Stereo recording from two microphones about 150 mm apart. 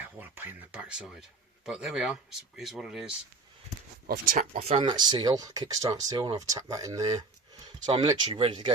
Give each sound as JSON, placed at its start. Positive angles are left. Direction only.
{"t": 0.0, "sound": "a man's voice", "side_deg": -10}
{"t": 4.0, "sound": "speech", "side_deg": -65}
{"t": 4.8, "sound": "speech", "side_deg": -30}